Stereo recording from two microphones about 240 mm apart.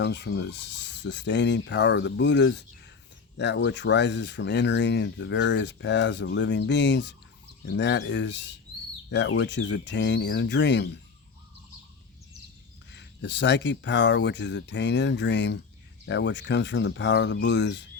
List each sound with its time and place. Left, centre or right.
0.0 s speech: left
12.9 s speech: left